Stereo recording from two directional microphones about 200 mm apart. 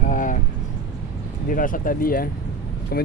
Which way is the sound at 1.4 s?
45° left (ahead or behind).